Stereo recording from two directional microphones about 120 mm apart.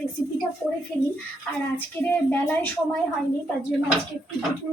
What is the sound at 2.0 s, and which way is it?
Speech, 20° left (ahead or behind).